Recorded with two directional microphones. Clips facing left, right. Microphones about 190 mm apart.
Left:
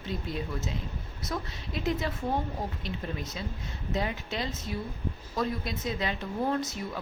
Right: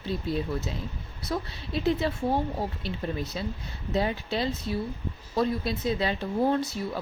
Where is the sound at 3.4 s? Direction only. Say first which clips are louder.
Right 4 dB; 35° right (ahead or behind).